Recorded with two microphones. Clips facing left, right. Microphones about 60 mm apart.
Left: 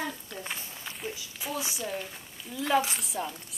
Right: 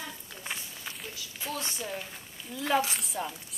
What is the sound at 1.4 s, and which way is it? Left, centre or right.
Speech, centre.